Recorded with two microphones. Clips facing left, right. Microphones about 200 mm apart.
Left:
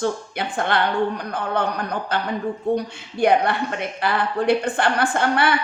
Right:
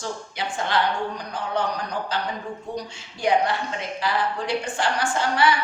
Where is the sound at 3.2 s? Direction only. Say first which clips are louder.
Left 4 dB; 60° left (ahead or behind).